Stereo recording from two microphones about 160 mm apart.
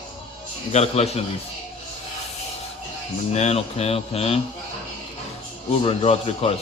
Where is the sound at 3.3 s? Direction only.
40° left (ahead or behind).